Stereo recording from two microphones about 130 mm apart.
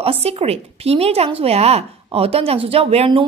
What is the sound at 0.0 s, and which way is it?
Speech, 50° right (ahead or behind).